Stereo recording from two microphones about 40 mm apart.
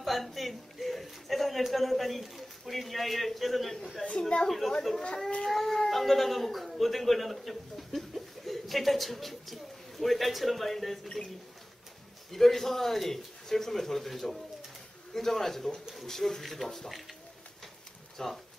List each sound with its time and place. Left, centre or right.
0.0 s speech: centre
4.0 s a woman's voice: left
4.5 s speech: centre
12.3 s a man's voice: centre
18.1 s speech: centre